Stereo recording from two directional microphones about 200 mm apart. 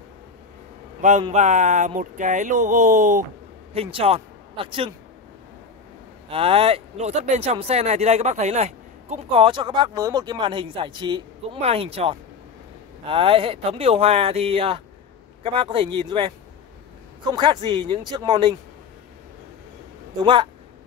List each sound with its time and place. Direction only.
1.3 s speech: 35° right (ahead or behind)
3.7 s speech: 30° right (ahead or behind)
6.2 s speech: 30° right (ahead or behind)